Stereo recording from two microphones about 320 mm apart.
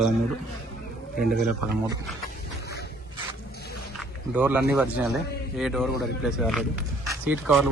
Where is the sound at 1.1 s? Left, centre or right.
Right.